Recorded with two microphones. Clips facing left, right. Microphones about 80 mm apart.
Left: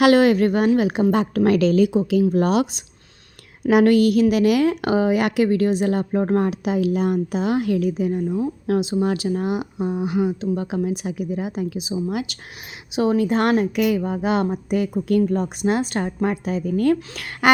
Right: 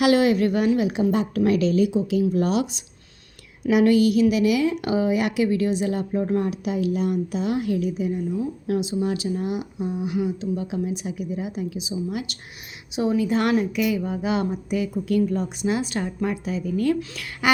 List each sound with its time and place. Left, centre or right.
0.0 s a woman's voice: left
3.7 s a woman's voice: left
12.9 s a woman's voice: left